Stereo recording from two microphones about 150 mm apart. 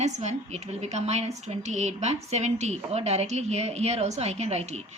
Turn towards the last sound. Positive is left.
turn(degrees=-45)  # may be behind; listen again after turning